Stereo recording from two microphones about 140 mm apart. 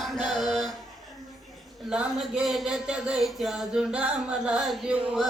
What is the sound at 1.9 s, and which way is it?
Speech, 5° right (ahead or behind).